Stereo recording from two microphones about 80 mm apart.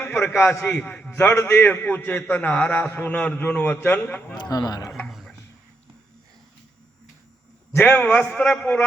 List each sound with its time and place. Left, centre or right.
0.3 s a man's voice: centre
4.4 s speech: left
5.0 s a sound: centre
7.9 s a man's voice: centre